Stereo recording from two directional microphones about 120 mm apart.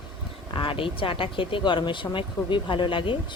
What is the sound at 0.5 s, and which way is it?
Speech, 45° left (ahead or behind).